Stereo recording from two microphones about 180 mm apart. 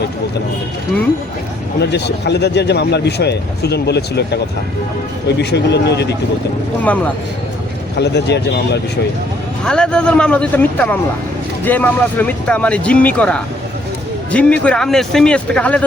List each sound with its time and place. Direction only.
1.8 s speech: 70° left (ahead or behind)
5.4 s speech: 70° left (ahead or behind)
6.8 s speech: 10° left (ahead or behind)
7.9 s speech: 70° left (ahead or behind)
9.6 s a man's voice: 5° left (ahead or behind)